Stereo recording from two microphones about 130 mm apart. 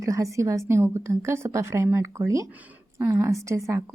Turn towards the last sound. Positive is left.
turn(degrees=-25)  # may be behind; listen again after turning